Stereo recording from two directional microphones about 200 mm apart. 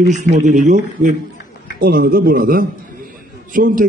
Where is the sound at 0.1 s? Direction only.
40° right (ahead or behind).